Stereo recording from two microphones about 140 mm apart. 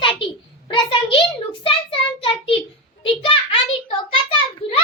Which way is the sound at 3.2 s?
40° left (ahead or behind).